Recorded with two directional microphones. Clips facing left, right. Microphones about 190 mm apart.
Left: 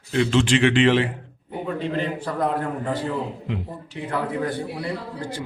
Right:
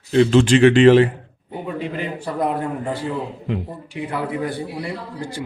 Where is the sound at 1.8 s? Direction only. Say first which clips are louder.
Left 2 dB; 10° right (ahead or behind).